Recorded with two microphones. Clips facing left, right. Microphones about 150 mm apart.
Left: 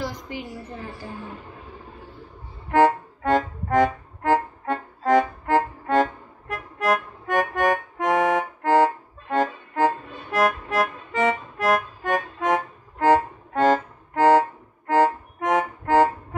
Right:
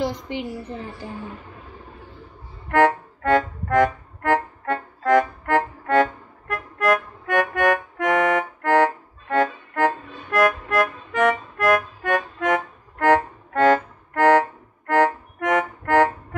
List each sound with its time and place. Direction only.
0.3 s a woman's voice: 20° right (ahead or behind)
2.7 s music: 60° right (ahead or behind)